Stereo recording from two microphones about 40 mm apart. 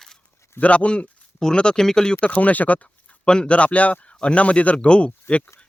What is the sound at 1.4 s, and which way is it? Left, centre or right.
Speech, centre.